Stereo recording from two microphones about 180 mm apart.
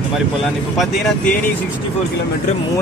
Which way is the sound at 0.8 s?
5° left (ahead or behind).